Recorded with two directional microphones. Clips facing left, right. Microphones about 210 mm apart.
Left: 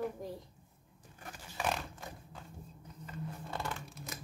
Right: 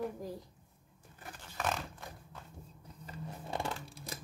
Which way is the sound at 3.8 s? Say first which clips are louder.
Even; 30° right (ahead or behind).